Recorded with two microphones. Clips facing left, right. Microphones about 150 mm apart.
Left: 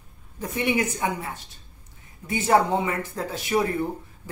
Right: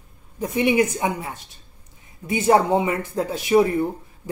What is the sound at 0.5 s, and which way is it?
Speech, 15° right (ahead or behind).